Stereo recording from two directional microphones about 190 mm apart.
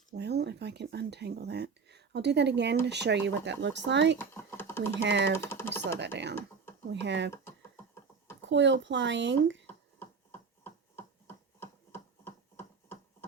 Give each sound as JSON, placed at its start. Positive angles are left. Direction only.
{"t": 0.1, "sound": "speech", "side_deg": -60}
{"t": 4.5, "sound": "typing", "side_deg": 10}
{"t": 4.9, "sound": "speech", "side_deg": -65}
{"t": 5.4, "sound": "speech", "side_deg": 10}
{"t": 6.0, "sound": "speech", "side_deg": -65}
{"t": 8.4, "sound": "speech", "side_deg": -70}
{"t": 10.6, "sound": "a sound", "side_deg": 10}